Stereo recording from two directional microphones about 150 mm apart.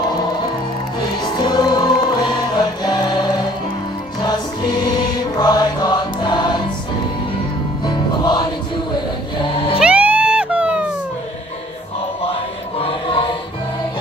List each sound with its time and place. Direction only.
1.2 s music: 30° left (ahead or behind)
7.8 s music: 30° left (ahead or behind)
9.8 s music: 10° right (ahead or behind)
12.7 s choir: 35° left (ahead or behind)